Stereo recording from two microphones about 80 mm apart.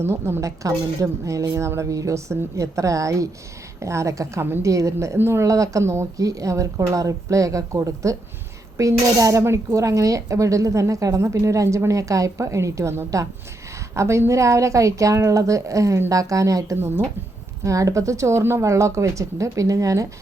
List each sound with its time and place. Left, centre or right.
0.0 s a woman's voice: right
16.7 s speech: right
17.6 s speech: right